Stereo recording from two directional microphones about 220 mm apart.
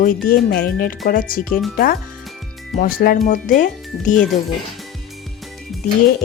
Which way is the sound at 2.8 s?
40° left (ahead or behind).